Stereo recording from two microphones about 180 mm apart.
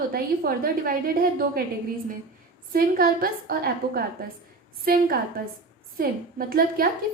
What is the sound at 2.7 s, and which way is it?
A woman's voice, 55° right (ahead or behind).